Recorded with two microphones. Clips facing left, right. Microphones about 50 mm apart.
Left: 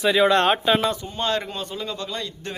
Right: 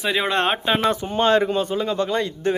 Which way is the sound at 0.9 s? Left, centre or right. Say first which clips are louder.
Right 7 dB; right.